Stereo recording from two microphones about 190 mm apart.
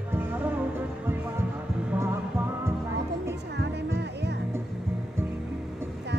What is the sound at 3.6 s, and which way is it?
Music, 65° right (ahead or behind).